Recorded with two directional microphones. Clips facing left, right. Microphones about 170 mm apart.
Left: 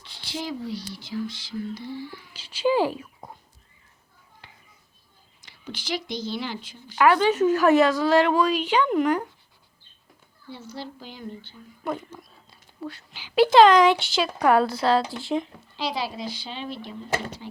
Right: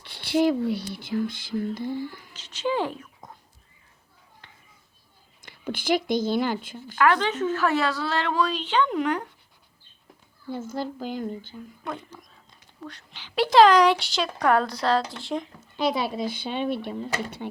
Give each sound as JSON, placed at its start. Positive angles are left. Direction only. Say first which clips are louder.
{"t": 0.0, "sound": "speech", "louder": "right 12 dB", "side_deg": -60}
{"t": 2.3, "sound": "a woman's voice", "louder": "left 5 dB", "side_deg": 10}
{"t": 5.4, "sound": "a woman's voice", "louder": "right 6 dB", "side_deg": -55}
{"t": 7.0, "sound": "a woman's voice", "louder": "left 3 dB", "side_deg": 10}
{"t": 10.5, "sound": "speech", "louder": "right 7 dB", "side_deg": -50}
{"t": 11.9, "sound": "speech", "louder": "left 6 dB", "side_deg": 5}
{"t": 15.6, "sound": "speech", "louder": "right 4 dB", "side_deg": -50}